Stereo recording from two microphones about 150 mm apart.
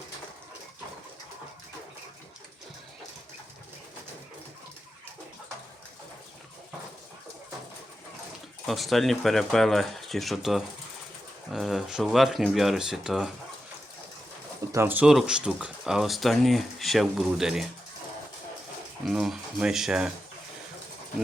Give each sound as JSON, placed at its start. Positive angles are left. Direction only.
{"t": 8.6, "sound": "speech", "side_deg": 0}
{"t": 14.7, "sound": "speech", "side_deg": -15}
{"t": 19.0, "sound": "speech", "side_deg": 0}